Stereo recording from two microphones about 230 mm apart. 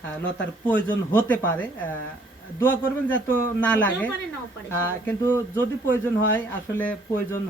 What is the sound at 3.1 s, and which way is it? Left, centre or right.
Speech, centre.